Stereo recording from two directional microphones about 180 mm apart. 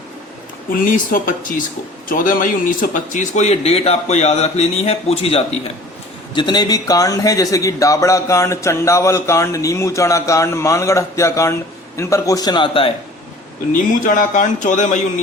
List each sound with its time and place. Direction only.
0.7 s a man's voice: 50° left (ahead or behind); by 12.9 s 30° left (ahead or behind)
14.0 s speech: 45° left (ahead or behind)